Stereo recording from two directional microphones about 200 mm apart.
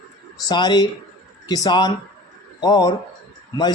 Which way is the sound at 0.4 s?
20° left (ahead or behind).